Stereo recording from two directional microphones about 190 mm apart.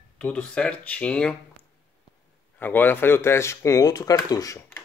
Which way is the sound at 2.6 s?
10° left (ahead or behind).